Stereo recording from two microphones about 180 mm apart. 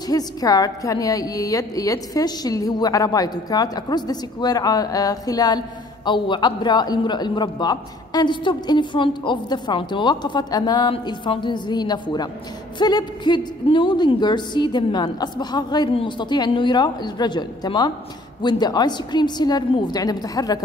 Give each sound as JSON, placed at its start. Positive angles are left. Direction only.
{"t": 0.1, "sound": "a man's voice", "side_deg": 20}